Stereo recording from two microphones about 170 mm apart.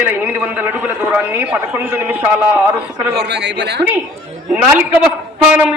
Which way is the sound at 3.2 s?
85° right.